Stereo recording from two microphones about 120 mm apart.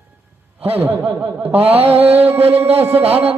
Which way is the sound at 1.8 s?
15° right (ahead or behind).